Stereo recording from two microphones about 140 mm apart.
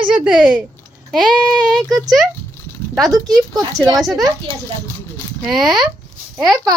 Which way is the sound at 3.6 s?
25° right (ahead or behind).